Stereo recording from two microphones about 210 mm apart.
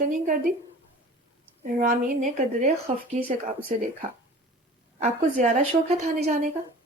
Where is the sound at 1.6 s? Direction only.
40° right (ahead or behind).